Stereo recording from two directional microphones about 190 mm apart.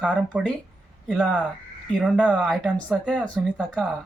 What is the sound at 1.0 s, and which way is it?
Speech, 5° right (ahead or behind).